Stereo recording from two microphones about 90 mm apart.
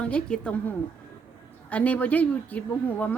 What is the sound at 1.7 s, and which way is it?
Speech, 15° left (ahead or behind).